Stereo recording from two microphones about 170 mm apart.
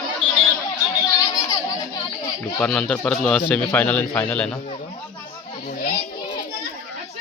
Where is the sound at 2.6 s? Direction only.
5° left (ahead or behind).